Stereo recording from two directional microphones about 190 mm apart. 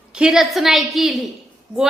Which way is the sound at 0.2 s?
Centre (ahead or behind).